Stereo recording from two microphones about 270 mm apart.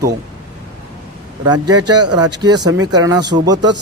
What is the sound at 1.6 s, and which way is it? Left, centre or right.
Speech, right.